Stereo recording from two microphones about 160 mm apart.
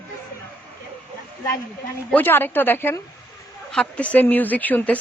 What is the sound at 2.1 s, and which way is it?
A woman's voice, 10° left (ahead or behind).